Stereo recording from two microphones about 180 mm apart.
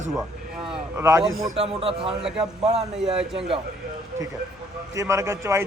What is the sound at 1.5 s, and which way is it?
A man's voice, 35° right (ahead or behind).